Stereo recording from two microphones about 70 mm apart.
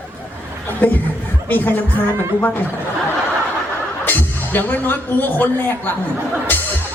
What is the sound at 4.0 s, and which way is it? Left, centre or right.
Speech, left.